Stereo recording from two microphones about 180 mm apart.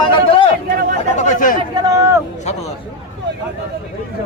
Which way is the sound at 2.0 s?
15° right (ahead or behind).